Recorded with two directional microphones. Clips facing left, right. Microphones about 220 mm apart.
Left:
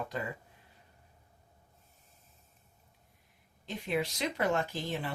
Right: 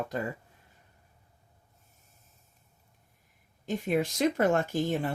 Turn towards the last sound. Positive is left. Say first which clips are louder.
# right 7 dB
turn(degrees=-45)  # may be behind; listen again after turning